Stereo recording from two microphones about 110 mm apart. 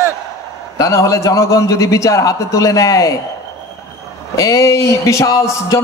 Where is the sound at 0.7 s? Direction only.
30° left (ahead or behind).